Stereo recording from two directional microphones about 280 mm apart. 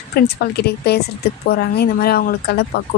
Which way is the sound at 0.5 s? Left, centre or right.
Left.